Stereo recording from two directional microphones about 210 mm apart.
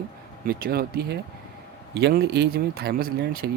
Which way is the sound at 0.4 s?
45° right (ahead or behind).